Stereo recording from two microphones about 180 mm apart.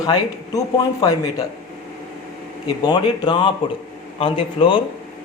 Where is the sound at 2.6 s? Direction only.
25° left (ahead or behind).